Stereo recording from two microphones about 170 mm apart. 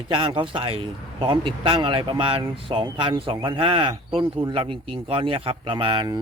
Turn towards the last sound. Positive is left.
turn(degrees=-25)  # may be behind; listen again after turning